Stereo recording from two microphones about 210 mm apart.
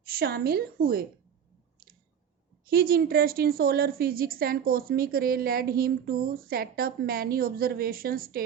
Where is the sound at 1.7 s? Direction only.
45° right (ahead or behind).